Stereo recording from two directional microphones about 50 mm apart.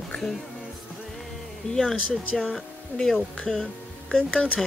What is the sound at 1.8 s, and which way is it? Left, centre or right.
Speech, centre.